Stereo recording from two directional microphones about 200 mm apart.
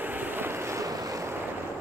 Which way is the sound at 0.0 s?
10° right (ahead or behind).